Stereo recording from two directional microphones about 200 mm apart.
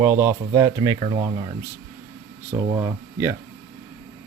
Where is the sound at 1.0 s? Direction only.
25° right (ahead or behind).